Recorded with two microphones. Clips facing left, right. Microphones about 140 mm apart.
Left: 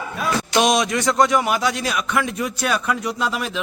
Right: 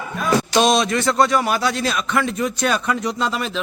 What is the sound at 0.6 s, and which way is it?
A man's voice, 15° left (ahead or behind).